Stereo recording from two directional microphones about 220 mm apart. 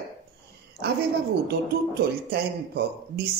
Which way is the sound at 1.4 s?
45° right (ahead or behind).